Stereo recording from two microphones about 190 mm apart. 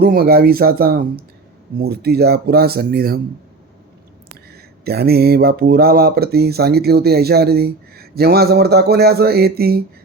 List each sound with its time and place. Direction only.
0.0 s speech: 55° right (ahead or behind)
4.5 s speech: 55° right (ahead or behind)